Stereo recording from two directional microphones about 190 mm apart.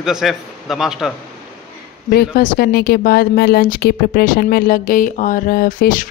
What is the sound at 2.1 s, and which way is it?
Speech, 55° left (ahead or behind).